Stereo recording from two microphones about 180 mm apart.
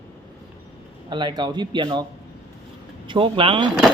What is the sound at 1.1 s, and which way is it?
Speech, 25° right (ahead or behind).